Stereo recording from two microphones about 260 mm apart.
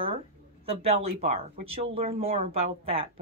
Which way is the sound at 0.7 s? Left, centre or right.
Right.